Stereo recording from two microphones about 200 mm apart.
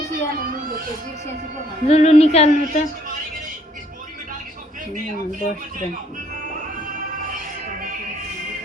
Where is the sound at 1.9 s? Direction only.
30° left (ahead or behind).